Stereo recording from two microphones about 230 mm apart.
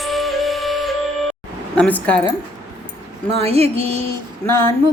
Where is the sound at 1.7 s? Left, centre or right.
Centre.